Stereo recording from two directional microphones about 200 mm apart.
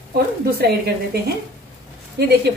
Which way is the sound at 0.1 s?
50° right (ahead or behind).